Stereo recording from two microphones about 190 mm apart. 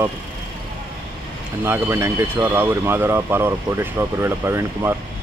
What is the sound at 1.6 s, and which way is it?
Speech, 15° right (ahead or behind).